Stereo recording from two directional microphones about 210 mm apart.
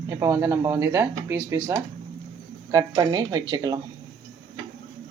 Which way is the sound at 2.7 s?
20° right (ahead or behind).